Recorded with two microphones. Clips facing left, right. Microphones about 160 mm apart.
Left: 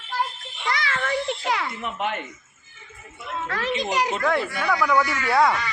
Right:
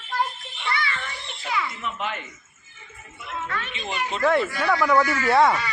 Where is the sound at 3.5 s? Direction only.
85° left.